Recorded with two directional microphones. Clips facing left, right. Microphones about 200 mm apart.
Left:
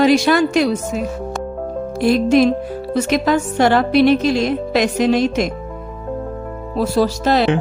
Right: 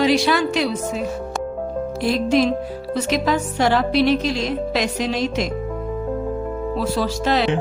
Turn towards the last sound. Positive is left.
turn(degrees=40)  # may be behind; listen again after turning